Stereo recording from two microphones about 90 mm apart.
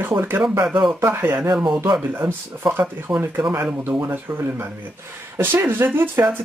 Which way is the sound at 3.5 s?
25° right (ahead or behind).